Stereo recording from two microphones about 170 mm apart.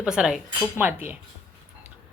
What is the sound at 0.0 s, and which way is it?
A woman's voice, 5° right (ahead or behind).